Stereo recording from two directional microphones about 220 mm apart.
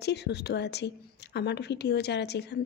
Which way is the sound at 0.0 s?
50° left (ahead or behind).